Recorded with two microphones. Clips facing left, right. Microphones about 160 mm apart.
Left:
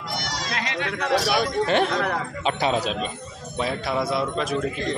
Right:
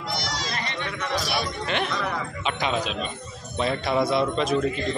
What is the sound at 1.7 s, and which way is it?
Speech, 45° left (ahead or behind).